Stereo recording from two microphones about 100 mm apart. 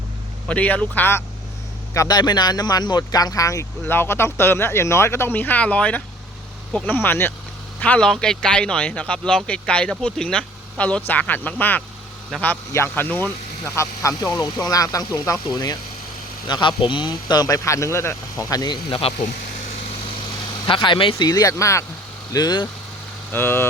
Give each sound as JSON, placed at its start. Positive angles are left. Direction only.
{"t": 0.4, "sound": "a man's voice", "side_deg": 15}
{"t": 1.9, "sound": "a man's voice", "side_deg": 30}
{"t": 2.1, "sound": "speech", "side_deg": 45}
{"t": 3.8, "sound": "speech", "side_deg": 20}
{"t": 7.8, "sound": "a man's voice", "side_deg": 10}
{"t": 13.7, "sound": "speech", "side_deg": 30}
{"t": 16.5, "sound": "speech", "side_deg": 50}
{"t": 20.7, "sound": "speech", "side_deg": 55}
{"t": 21.2, "sound": "speech", "side_deg": 40}
{"t": 22.3, "sound": "speech", "side_deg": 40}
{"t": 23.3, "sound": "speech", "side_deg": 20}